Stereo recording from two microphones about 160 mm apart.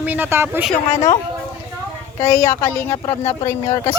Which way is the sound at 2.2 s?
15° left (ahead or behind).